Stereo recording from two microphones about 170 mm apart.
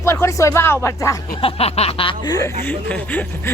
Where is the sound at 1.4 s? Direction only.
35° left (ahead or behind); by 2.5 s 20° left (ahead or behind).